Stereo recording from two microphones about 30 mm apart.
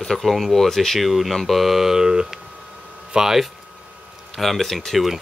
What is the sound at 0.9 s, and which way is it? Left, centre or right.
Speech, centre.